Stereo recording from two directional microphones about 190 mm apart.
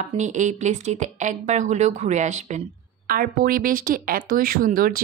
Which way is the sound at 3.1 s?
50° right (ahead or behind).